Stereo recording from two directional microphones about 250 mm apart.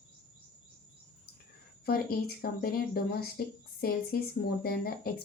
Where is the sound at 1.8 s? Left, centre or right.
Left.